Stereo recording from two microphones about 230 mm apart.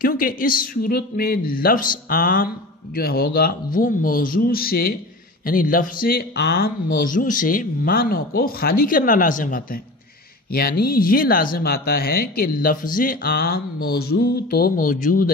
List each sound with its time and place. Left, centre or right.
0.0 s speech: left